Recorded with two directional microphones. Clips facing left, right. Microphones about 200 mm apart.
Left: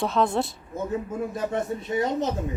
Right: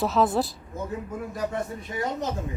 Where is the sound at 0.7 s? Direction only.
25° left (ahead or behind).